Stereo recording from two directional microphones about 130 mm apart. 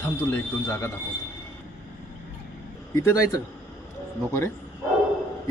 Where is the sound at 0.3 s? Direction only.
20° left (ahead or behind).